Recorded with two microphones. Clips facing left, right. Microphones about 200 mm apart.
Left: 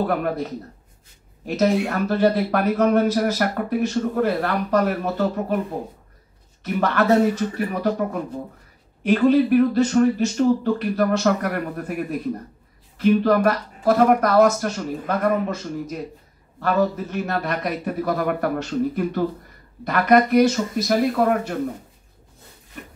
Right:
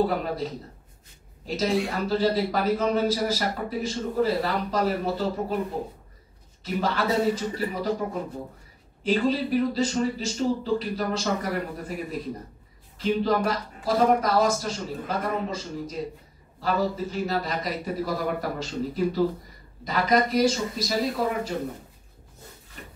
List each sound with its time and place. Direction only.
0.0 s speech: 60° left (ahead or behind)
6.6 s speech: 60° left (ahead or behind)